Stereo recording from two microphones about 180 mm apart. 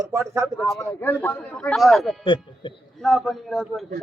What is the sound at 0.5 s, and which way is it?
Speech, centre (ahead or behind).